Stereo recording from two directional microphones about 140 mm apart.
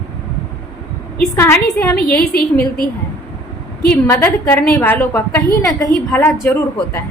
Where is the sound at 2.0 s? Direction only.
90° left.